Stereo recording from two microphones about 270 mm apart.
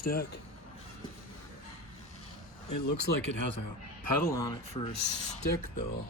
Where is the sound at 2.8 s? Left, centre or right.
Left.